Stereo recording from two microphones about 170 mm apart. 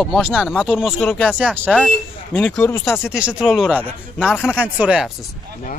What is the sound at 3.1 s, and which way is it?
Speech, 5° right (ahead or behind).